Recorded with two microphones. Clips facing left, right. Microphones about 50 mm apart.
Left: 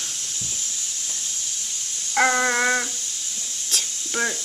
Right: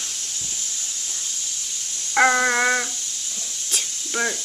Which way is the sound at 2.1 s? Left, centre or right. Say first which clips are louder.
Right 2 dB; centre.